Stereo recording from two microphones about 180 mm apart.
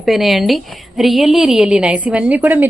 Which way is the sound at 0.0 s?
Centre (ahead or behind).